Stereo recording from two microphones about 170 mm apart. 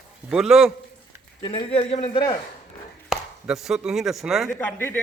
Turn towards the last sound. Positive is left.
turn(degrees=10)  # may be behind; listen again after turning